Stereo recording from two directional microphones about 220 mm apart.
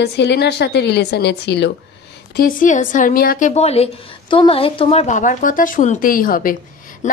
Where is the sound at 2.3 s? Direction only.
40° left (ahead or behind).